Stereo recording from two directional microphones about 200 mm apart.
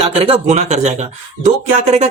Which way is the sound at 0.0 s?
30° right (ahead or behind).